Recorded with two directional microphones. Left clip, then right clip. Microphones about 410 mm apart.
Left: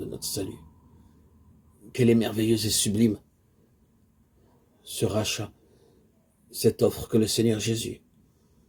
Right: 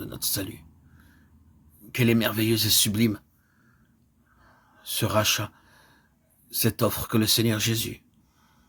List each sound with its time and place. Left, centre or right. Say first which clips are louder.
0.0 s speech: right 1 dB; right
1.9 s speech: left 1 dB; right
4.8 s speech: right 3 dB; right
6.5 s speech: left 3 dB; right